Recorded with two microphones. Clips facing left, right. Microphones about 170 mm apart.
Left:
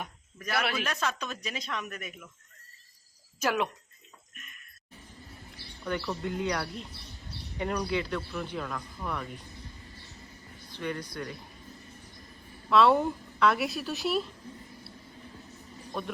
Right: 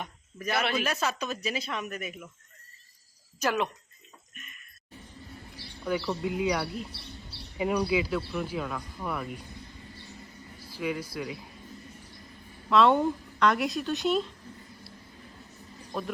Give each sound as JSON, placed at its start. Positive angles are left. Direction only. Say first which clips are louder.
{"t": 0.3, "sound": "a man's voice", "louder": "right 2 dB", "side_deg": -10}
{"t": 3.4, "sound": "speech", "louder": "right 1 dB", "side_deg": 10}
{"t": 5.8, "sound": "speech", "louder": "right 3 dB", "side_deg": -5}
{"t": 10.7, "sound": "speech", "louder": "right 3 dB", "side_deg": -5}
{"t": 12.7, "sound": "speech", "louder": "right 1 dB", "side_deg": 0}
{"t": 15.9, "sound": "speech", "louder": "right 2 dB", "side_deg": 0}